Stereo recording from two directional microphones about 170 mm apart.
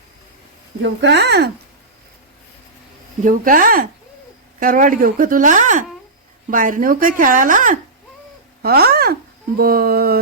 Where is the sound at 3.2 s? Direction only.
55° right (ahead or behind).